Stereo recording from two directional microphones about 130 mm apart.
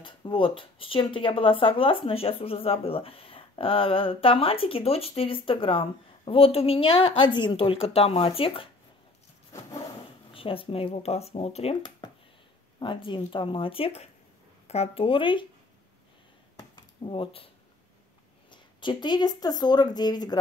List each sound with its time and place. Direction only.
0.0 s speech: 40° left (ahead or behind)
10.3 s speech: 45° left (ahead or behind)
12.7 s speech: 40° left (ahead or behind)
16.5 s a sound: 40° left (ahead or behind)
18.5 s speech: 35° left (ahead or behind)